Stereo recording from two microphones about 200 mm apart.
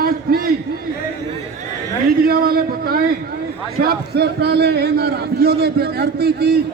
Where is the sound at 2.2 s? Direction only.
50° right (ahead or behind).